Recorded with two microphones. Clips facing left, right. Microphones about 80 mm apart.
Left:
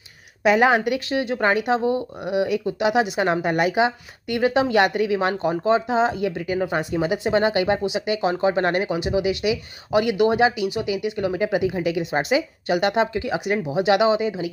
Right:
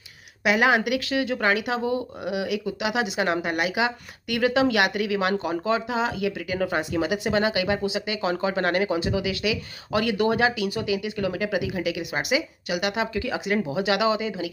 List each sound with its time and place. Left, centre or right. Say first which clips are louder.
0.5 s speech: left 3 dB; left